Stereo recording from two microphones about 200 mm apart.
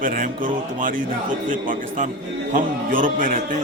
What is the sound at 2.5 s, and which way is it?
Speech, 40° right (ahead or behind).